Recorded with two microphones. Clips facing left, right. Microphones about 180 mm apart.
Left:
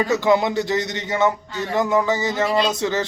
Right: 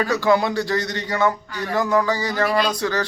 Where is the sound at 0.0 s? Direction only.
20° left (ahead or behind).